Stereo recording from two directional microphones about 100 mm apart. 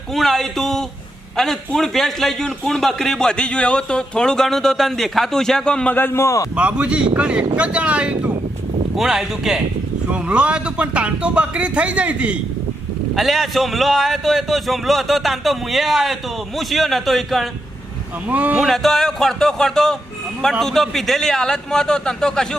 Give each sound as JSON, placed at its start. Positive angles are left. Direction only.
{"t": 0.1, "sound": "a man's voice", "side_deg": 0}
{"t": 6.6, "sound": "a man's voice", "side_deg": -10}
{"t": 13.1, "sound": "a man's voice", "side_deg": 0}
{"t": 18.3, "sound": "speech", "side_deg": -15}
{"t": 18.6, "sound": "a man's voice", "side_deg": 0}